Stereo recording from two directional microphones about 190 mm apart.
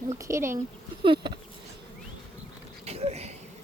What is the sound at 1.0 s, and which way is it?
Insect, 25° right (ahead or behind).